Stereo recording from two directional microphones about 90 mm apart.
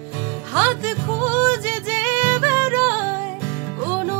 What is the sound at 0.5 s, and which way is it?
Music, 30° right (ahead or behind).